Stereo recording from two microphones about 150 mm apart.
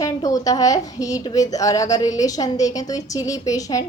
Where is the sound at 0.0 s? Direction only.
20° left (ahead or behind).